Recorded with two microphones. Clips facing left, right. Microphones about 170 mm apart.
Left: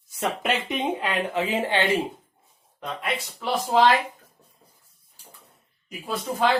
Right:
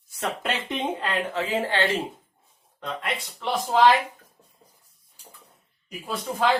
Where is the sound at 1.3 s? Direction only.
20° left (ahead or behind).